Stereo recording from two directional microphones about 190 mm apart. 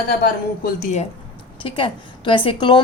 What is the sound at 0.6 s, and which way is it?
Speech, 40° left (ahead or behind).